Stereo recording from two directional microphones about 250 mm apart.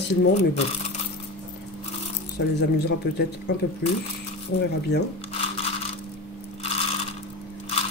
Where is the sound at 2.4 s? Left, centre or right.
Left.